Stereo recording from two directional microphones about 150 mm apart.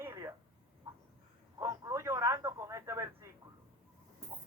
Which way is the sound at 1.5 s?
20° right (ahead or behind).